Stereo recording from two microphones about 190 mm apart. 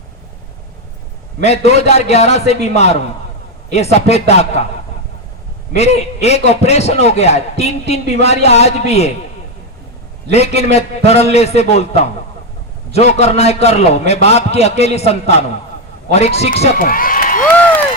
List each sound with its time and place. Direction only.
1.4 s a man's voice: 35° left (ahead or behind)
5.7 s a man's voice: 35° left (ahead or behind)
10.3 s a man's voice: 35° left (ahead or behind)
16.8 s a sound: 45° left (ahead or behind)